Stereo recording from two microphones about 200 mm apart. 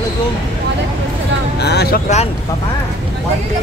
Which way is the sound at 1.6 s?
55° left (ahead or behind).